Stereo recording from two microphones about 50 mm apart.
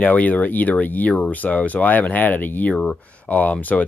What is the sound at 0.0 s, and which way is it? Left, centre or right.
Speech, left.